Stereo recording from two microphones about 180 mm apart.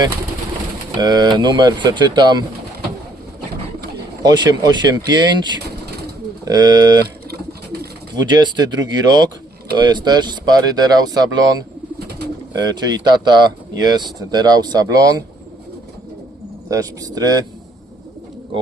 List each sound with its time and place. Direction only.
0.9 s speech: 25° right (ahead or behind)
4.2 s speech: 20° right (ahead or behind)
7.0 s bird: 60° right (ahead or behind)
8.1 s speech: 20° right (ahead or behind)
16.6 s speech: 20° right (ahead or behind)